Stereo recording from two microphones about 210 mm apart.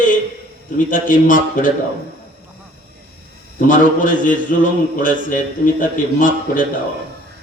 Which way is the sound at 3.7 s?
40° left (ahead or behind).